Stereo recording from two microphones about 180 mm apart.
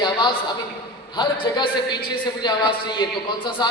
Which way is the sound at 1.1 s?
25° left (ahead or behind).